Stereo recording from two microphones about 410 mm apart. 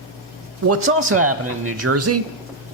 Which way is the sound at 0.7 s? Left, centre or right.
Right.